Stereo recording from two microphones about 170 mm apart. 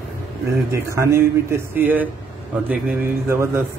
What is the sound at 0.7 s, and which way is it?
A man's voice, 15° right (ahead or behind).